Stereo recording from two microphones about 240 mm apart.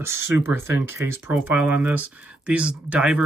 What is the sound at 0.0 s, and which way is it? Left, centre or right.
Speech, centre.